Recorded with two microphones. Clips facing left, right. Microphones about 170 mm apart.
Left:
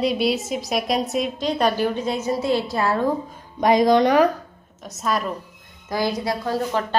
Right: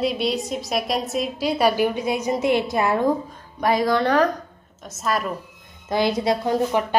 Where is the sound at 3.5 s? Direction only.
20° left (ahead or behind).